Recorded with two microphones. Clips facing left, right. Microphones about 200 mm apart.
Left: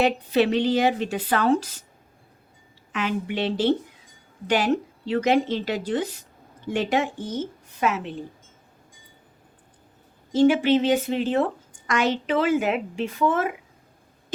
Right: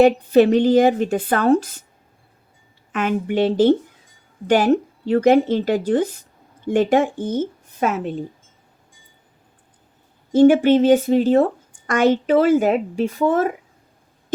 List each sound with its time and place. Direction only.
0.0 s a woman's voice: 45° right (ahead or behind)
2.9 s a woman's voice: 50° right (ahead or behind)
10.3 s a woman's voice: 50° right (ahead or behind)